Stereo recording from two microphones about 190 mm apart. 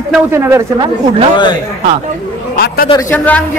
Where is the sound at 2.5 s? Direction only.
55° left (ahead or behind).